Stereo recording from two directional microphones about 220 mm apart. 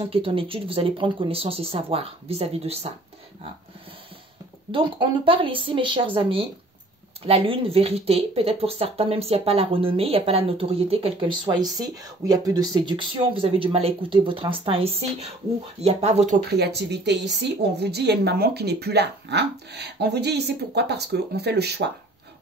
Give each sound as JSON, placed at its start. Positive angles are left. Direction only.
{"t": 0.0, "sound": "speech", "side_deg": -25}
{"t": 4.6, "sound": "speech", "side_deg": -20}
{"t": 16.4, "sound": "a woman's voice", "side_deg": -50}